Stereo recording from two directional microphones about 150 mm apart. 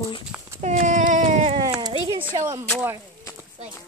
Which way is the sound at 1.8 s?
35° right (ahead or behind).